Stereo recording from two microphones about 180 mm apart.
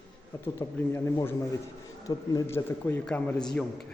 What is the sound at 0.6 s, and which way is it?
A man's voice, 15° left (ahead or behind).